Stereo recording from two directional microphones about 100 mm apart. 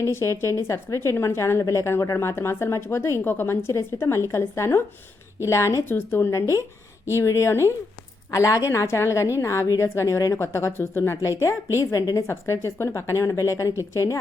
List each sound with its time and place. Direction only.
0.0 s a woman's voice: 30° left (ahead or behind)
12.3 s a woman's voice: 25° left (ahead or behind)